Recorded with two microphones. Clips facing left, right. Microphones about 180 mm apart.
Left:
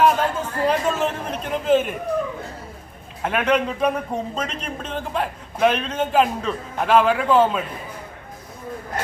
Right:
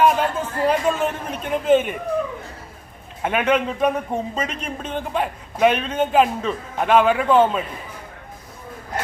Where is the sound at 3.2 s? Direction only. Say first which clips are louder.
Right 1 dB; centre (ahead or behind).